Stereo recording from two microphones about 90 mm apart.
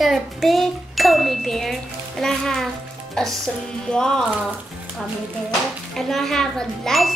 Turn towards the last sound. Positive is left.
turn(degrees=5)  # may be behind; listen again after turning